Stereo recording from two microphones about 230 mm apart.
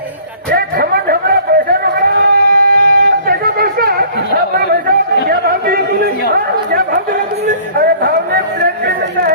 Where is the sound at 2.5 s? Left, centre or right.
Right.